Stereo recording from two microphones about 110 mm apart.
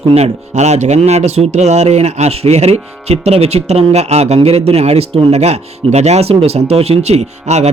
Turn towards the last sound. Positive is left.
turn(degrees=-85)